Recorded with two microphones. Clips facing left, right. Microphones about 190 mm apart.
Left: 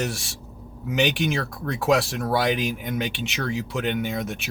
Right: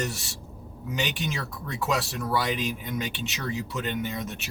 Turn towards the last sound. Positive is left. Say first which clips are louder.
# left 5 dB
turn(degrees=75)  # may be behind; listen again after turning